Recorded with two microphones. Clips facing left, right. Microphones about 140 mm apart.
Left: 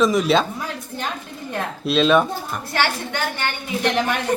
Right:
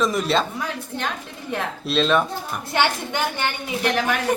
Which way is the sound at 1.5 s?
Centre (ahead or behind).